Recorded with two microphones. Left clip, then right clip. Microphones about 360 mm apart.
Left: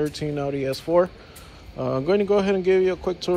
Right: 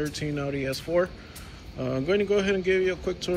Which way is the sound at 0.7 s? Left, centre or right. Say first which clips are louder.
Left 6 dB; centre.